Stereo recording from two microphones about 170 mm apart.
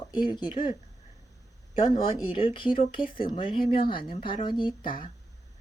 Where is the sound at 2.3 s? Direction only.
30° left (ahead or behind).